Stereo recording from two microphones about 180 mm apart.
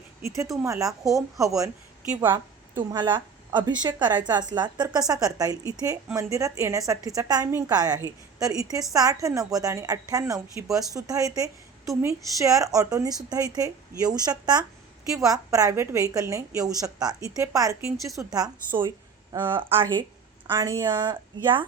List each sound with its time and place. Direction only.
0.3 s a woman's voice: 15° right (ahead or behind)